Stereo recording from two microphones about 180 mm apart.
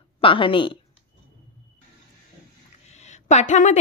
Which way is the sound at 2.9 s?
40° left (ahead or behind).